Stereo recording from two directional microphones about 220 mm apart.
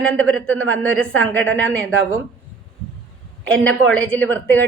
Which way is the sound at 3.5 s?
5° left (ahead or behind).